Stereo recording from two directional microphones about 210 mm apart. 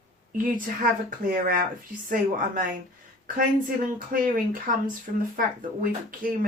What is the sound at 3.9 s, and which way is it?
Speech, 40° right (ahead or behind).